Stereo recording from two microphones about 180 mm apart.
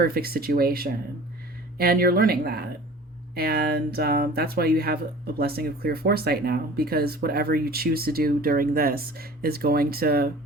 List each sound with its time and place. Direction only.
0.0 s speech: 55° right (ahead or behind)